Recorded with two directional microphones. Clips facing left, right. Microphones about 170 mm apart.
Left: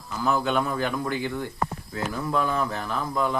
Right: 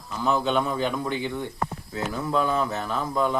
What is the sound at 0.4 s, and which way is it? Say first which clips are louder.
Speech: right 1 dB; 20° right (ahead or behind).